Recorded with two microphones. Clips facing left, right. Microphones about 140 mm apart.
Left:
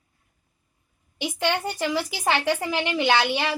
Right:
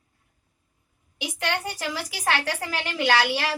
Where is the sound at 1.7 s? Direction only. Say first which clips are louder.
Left 5 dB; 25° left (ahead or behind).